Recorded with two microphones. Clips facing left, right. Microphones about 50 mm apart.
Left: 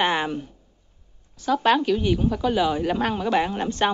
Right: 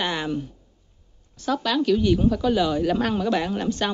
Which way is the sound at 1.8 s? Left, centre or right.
Centre.